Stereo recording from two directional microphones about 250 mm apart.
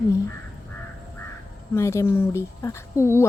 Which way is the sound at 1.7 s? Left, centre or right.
Centre.